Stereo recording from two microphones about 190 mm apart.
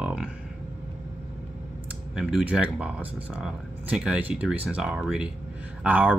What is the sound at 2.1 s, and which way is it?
Speech, 5° right (ahead or behind).